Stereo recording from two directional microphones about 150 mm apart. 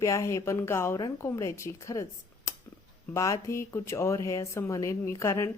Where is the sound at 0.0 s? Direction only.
20° left (ahead or behind).